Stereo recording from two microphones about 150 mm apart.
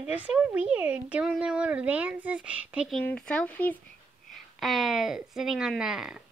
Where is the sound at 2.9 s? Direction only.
5° left (ahead or behind).